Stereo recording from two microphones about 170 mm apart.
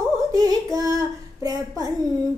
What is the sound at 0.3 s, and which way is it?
Female singing, 20° right (ahead or behind).